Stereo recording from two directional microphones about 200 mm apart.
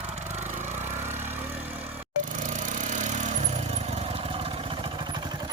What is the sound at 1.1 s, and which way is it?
Vehicle, 10° right (ahead or behind).